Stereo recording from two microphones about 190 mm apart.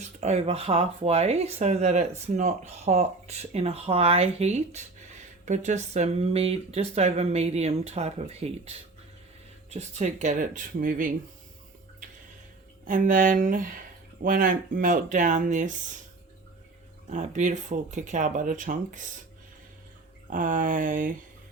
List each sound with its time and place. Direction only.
0.0 s speech: 35° right (ahead or behind)
12.8 s speech: 45° right (ahead or behind)
17.1 s speech: 40° right (ahead or behind)
20.3 s speech: 45° right (ahead or behind)